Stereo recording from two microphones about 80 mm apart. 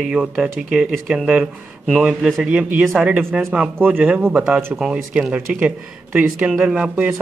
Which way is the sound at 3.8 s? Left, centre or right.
Right.